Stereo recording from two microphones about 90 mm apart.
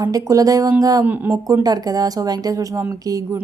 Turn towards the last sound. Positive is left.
turn(degrees=-40)  # may be behind; listen again after turning